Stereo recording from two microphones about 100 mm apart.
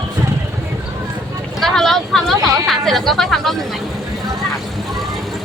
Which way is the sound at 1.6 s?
5° left (ahead or behind).